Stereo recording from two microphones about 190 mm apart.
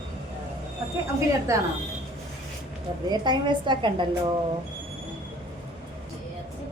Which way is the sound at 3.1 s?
25° right (ahead or behind).